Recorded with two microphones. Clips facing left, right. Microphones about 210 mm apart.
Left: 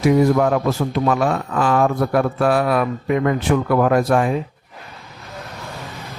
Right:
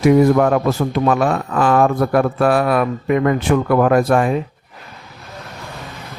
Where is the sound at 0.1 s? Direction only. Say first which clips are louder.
Right 3 dB; 55° right (ahead or behind).